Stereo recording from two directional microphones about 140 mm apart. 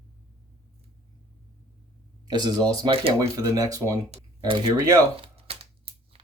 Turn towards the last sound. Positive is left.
turn(degrees=-45)  # may be behind; listen again after turning